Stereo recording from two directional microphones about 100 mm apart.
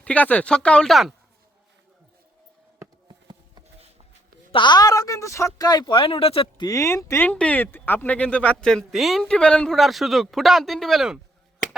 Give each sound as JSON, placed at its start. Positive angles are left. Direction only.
{"t": 0.0, "sound": "speech", "side_deg": 15}
{"t": 3.1, "sound": "a sound", "side_deg": -50}
{"t": 4.5, "sound": "a woman's voice", "side_deg": 50}
{"t": 5.5, "sound": "speech", "side_deg": 45}
{"t": 6.6, "sound": "speech", "side_deg": 35}
{"t": 7.3, "sound": "speech", "side_deg": 15}